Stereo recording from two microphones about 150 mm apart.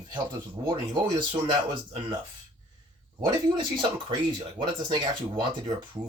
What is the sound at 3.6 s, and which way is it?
Speech, 30° right (ahead or behind).